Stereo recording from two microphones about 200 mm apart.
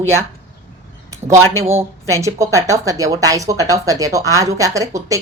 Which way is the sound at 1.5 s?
15° right (ahead or behind).